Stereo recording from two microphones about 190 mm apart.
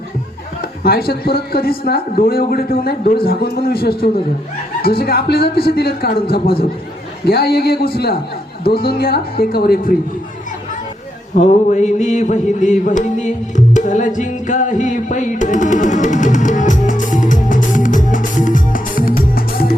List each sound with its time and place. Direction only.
0.6 s a man's voice: 50° left (ahead or behind)
11.3 s mantra: 40° left (ahead or behind)
14.2 s music: 40° left (ahead or behind)